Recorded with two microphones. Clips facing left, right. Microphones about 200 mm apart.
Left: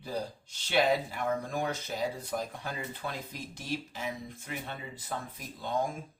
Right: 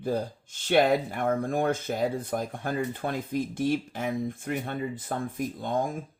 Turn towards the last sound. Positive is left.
turn(degrees=-50)  # may be behind; listen again after turning